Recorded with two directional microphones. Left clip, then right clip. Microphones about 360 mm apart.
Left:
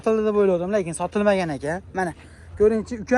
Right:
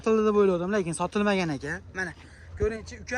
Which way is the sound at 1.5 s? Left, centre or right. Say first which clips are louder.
Left 7 dB; centre.